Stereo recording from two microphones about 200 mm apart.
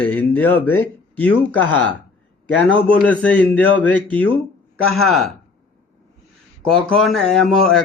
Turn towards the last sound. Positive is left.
turn(degrees=0)  # may be behind; listen again after turning